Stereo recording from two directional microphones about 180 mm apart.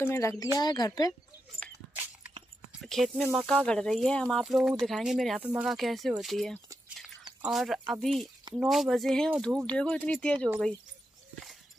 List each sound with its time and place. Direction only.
0.0 s speech: 15° left (ahead or behind)
2.8 s speech: centre (ahead or behind)